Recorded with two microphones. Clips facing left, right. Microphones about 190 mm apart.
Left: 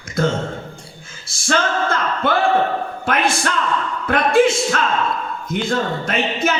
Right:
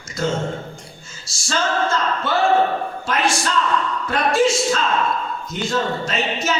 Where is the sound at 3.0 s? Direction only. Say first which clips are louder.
Left 3 dB; 55° left (ahead or behind).